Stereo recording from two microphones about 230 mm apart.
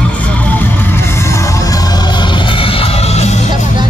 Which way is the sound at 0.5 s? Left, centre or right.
Centre.